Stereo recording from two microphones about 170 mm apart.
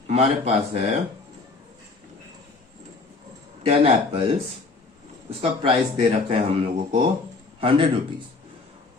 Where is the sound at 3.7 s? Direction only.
35° right (ahead or behind).